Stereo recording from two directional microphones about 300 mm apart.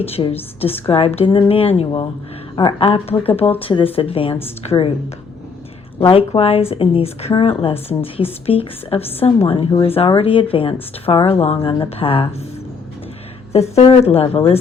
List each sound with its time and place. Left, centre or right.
0.2 s speech: centre
6.0 s speech: centre
13.5 s speech: left